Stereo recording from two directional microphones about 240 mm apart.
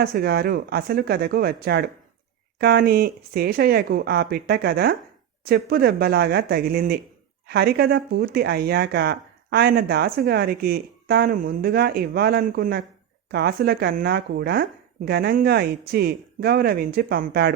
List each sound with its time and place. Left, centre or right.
0.0 s speech: right